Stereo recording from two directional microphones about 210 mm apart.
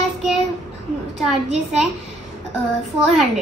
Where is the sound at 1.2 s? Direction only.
Centre (ahead or behind).